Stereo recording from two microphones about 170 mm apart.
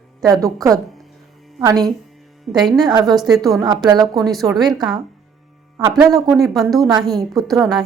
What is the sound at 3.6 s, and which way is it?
Speech, 25° right (ahead or behind).